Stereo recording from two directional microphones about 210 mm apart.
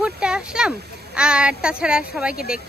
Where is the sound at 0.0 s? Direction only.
5° right (ahead or behind).